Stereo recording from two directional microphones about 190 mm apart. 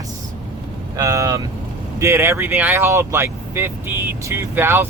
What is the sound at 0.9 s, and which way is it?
Vehicle, 15° right (ahead or behind).